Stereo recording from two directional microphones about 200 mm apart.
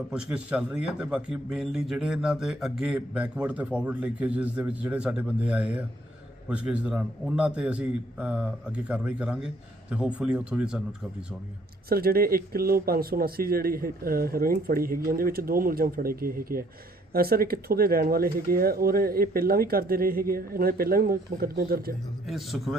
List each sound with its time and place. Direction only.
0.1 s a man's voice: 5° right (ahead or behind)
11.9 s speech: 50° right (ahead or behind)
22.3 s a man's voice: centre (ahead or behind)